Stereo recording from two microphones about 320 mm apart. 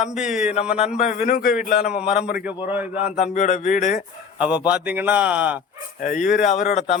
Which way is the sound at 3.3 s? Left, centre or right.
Left.